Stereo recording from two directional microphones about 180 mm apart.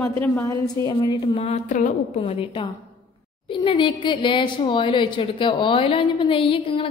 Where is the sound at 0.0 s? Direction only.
15° left (ahead or behind); by 2.3 s 45° left (ahead or behind).